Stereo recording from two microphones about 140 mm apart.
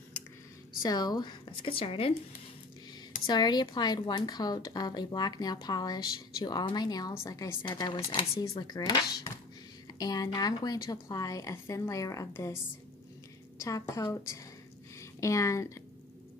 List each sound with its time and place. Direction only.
0.8 s speech: 30° left (ahead or behind)
3.3 s a woman's voice: 30° left (ahead or behind)
13.6 s a woman's voice: 20° left (ahead or behind)